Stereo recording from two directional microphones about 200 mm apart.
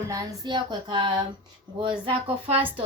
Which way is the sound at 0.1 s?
15° right (ahead or behind).